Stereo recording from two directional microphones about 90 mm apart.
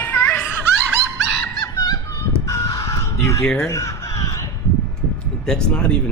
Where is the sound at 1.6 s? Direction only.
45° left (ahead or behind).